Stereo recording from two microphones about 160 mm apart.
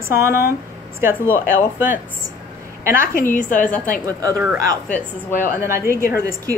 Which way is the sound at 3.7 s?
10° left (ahead or behind).